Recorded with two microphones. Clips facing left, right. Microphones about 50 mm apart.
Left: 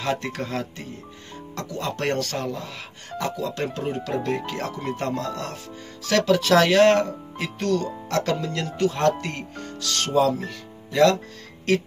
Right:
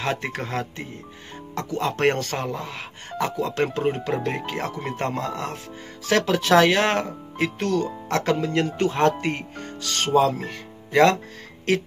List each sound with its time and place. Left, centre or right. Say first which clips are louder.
0.0 s speech: even; right
2.0 s speech: right 3 dB; right
4.1 s speech: even; centre
10.9 s speech: right 1 dB; right